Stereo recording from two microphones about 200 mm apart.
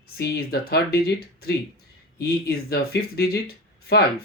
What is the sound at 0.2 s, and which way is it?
Speech, 50° left (ahead or behind).